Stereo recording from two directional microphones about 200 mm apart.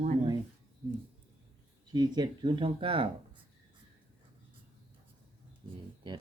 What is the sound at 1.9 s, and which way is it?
Speech, 20° right (ahead or behind).